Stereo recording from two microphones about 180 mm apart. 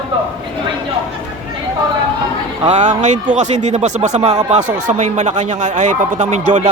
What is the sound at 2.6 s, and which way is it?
Speech, 40° right (ahead or behind).